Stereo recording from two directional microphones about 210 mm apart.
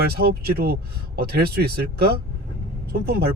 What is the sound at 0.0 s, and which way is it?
Speech, 45° right (ahead or behind).